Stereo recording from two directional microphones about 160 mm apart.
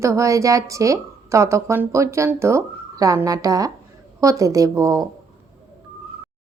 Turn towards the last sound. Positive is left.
turn(degrees=-20)  # may be behind; listen again after turning